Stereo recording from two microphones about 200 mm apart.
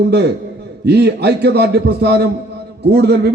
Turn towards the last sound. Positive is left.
turn(degrees=-55)  # may be behind; listen again after turning